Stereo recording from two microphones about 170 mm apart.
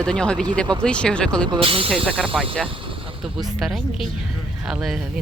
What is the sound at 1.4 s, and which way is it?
Speech, 30° right (ahead or behind).